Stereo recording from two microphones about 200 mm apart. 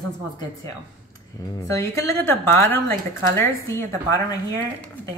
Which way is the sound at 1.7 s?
15° left (ahead or behind).